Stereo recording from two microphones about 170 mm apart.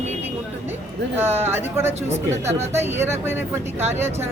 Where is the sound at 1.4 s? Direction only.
15° right (ahead or behind).